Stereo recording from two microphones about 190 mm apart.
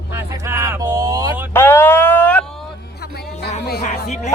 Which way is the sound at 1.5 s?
10° left (ahead or behind).